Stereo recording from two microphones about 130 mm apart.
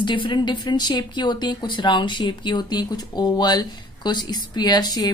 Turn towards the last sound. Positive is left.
turn(degrees=30)  # may be behind; listen again after turning